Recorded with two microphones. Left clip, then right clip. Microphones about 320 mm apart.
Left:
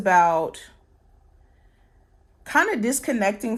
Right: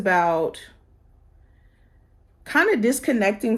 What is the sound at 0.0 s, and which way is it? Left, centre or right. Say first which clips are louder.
Speech: left 2 dB; left.